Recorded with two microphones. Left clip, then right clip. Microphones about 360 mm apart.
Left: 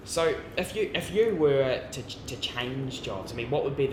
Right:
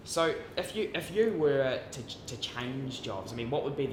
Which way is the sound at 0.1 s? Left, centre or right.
Right.